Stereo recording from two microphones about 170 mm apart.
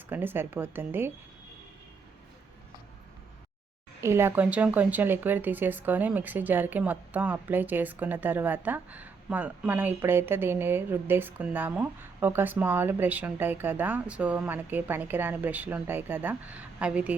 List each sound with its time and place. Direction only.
0.1 s speech: 10° right (ahead or behind)
4.0 s speech: 15° right (ahead or behind)